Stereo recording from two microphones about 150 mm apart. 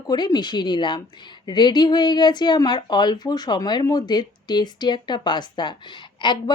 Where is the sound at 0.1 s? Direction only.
30° left (ahead or behind).